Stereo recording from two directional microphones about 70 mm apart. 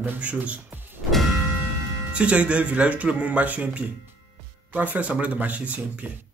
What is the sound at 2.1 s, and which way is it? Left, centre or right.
Speech, centre.